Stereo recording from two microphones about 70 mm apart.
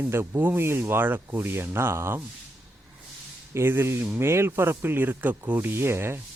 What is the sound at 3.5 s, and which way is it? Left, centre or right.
Speech, right.